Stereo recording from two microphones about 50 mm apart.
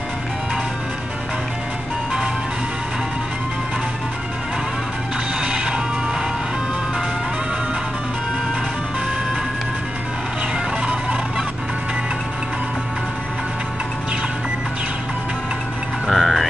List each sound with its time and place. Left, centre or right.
5.4 s music: centre
10.9 s music: right
16.1 s music: centre